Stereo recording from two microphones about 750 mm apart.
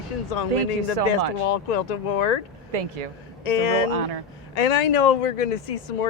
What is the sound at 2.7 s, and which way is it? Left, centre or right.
Speech, right.